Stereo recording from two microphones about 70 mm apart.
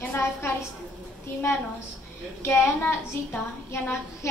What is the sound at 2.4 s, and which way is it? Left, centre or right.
Speech, left.